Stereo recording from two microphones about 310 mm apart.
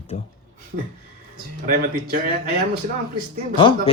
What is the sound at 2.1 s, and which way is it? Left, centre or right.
Speech, right.